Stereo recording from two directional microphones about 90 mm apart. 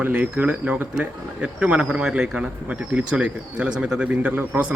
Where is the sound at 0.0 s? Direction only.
20° right (ahead or behind).